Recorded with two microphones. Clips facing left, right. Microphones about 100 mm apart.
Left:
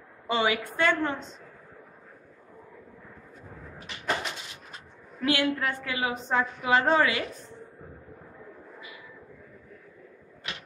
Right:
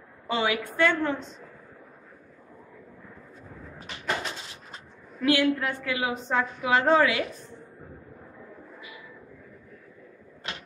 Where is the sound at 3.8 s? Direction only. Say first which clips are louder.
Even; 35° right (ahead or behind).